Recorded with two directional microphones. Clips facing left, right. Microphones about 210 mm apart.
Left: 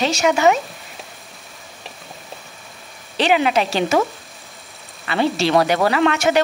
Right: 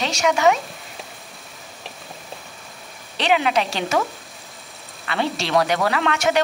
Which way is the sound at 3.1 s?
5° left (ahead or behind).